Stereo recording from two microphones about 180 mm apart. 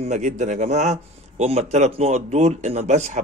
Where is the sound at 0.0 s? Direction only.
40° right (ahead or behind).